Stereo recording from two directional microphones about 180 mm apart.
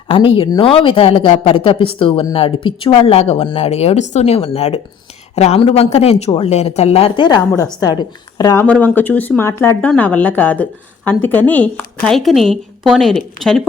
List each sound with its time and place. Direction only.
0.1 s speech: 30° left (ahead or behind)
8.6 s a woman's voice: 10° left (ahead or behind)